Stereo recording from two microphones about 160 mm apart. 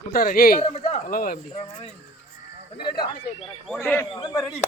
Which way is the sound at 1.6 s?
40° left (ahead or behind).